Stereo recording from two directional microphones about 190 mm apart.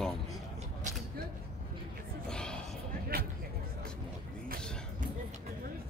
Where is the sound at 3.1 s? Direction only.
50° right (ahead or behind).